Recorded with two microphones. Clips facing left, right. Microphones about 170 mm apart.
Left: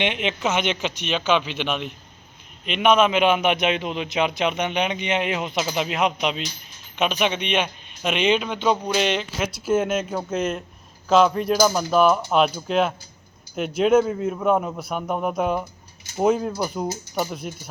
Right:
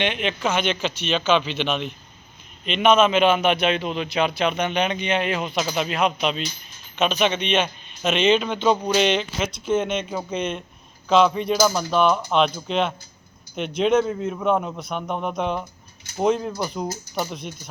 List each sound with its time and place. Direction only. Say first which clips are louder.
0.0 s a man's voice: even; 20° left (ahead or behind); by 17.5 s 5° left (ahead or behind)